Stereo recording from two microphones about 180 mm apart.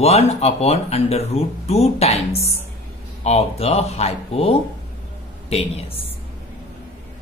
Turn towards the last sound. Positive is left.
turn(degrees=35)  # may be behind; listen again after turning